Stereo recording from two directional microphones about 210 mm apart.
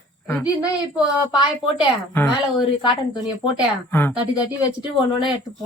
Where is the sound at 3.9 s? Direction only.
10° left (ahead or behind).